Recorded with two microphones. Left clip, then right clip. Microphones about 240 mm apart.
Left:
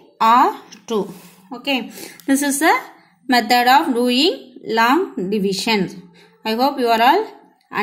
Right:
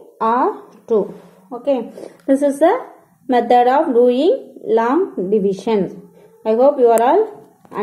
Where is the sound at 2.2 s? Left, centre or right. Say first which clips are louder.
Right 3 dB; left.